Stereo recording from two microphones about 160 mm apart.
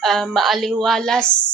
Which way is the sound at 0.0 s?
Centre (ahead or behind).